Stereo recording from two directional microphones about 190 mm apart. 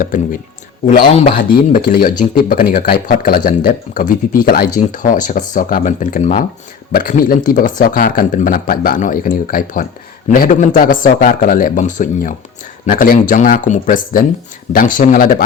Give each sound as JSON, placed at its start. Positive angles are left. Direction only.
{"t": 0.0, "sound": "speech", "side_deg": 45}